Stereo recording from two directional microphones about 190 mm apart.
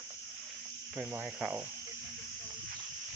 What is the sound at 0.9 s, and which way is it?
Speech, 10° right (ahead or behind).